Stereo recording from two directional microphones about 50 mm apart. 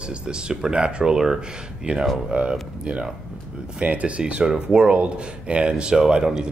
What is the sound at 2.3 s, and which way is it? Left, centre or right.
Speech, right.